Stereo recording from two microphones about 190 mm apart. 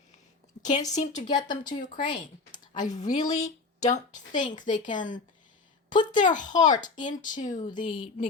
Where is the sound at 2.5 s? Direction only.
40° left (ahead or behind).